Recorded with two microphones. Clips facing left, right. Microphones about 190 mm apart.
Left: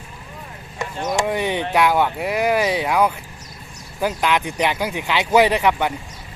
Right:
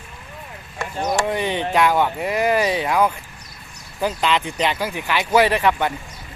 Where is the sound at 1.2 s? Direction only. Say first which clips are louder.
Left 1 dB; 15° left (ahead or behind).